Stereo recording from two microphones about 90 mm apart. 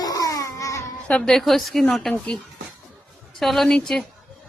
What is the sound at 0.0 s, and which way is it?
Baby cry, 40° left (ahead or behind).